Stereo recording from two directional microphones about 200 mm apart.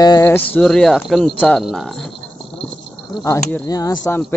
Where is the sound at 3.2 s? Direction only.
15° left (ahead or behind).